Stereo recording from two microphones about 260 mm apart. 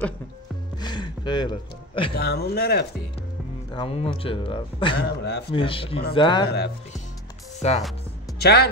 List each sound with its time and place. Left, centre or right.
0.7 s speech: centre
2.1 s speech: left
3.7 s a man's voice: left
5.0 s speech: left
5.5 s a man's voice: centre
7.6 s a man's voice: left
8.4 s speech: left